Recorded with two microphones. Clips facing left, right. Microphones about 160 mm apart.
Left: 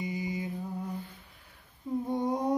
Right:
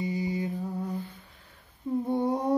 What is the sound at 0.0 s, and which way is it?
Mantra, 35° right (ahead or behind).